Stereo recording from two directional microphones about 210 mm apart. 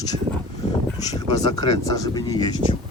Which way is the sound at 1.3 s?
20° left (ahead or behind).